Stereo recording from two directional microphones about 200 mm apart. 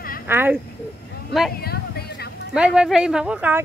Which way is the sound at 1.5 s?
50° left (ahead or behind).